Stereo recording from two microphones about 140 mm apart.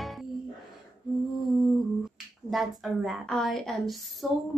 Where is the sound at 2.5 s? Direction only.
Centre (ahead or behind).